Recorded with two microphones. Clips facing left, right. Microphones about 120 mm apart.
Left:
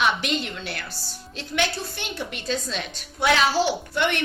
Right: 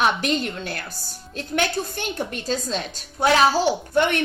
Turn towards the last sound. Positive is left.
turn(degrees=-45)  # may be behind; listen again after turning